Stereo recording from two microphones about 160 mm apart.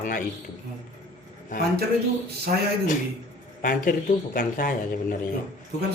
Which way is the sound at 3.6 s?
65° left (ahead or behind).